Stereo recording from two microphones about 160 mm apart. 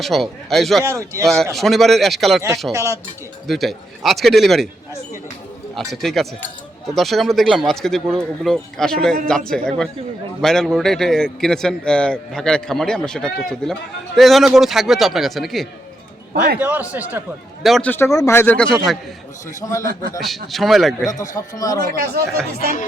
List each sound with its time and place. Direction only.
0.0 s a man's voice: centre (ahead or behind)
0.9 s a man's voice: 20° right (ahead or behind)
1.5 s a man's voice: centre (ahead or behind)
2.7 s a man's voice: 20° right (ahead or behind)
3.4 s a man's voice: centre (ahead or behind)
5.7 s a man's voice: centre (ahead or behind)
16.6 s a man's voice: 10° right (ahead or behind)
17.6 s a man's voice: centre (ahead or behind)
17.9 s speech: 20° left (ahead or behind)
19.6 s a man's voice: 20° left (ahead or behind)
19.9 s speech: 70° right (ahead or behind)
20.1 s a man's voice: centre (ahead or behind)
21.1 s a man's voice: 20° left (ahead or behind)
21.8 s speech: 80° right